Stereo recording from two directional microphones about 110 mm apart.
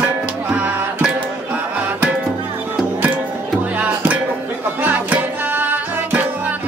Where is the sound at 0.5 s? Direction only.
15° right (ahead or behind).